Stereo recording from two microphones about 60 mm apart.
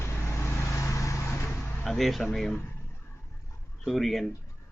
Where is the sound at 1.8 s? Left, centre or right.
Centre.